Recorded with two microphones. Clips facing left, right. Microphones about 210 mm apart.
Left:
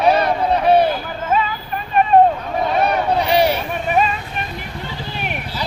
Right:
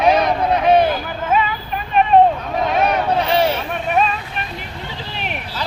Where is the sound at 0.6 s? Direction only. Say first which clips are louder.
Even; 5° left (ahead or behind).